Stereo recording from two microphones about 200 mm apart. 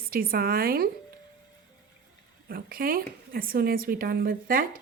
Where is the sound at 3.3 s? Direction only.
45° right (ahead or behind).